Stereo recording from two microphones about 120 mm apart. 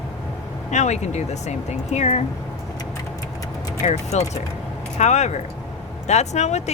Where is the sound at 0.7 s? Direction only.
70° left (ahead or behind).